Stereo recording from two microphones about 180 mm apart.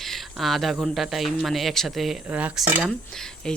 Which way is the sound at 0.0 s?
Centre (ahead or behind).